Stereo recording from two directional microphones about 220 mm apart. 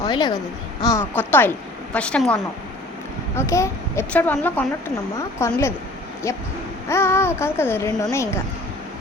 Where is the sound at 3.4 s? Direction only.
15° left (ahead or behind).